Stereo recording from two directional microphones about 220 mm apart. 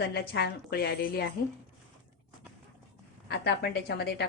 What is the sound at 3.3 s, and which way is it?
Speech, 50° left (ahead or behind).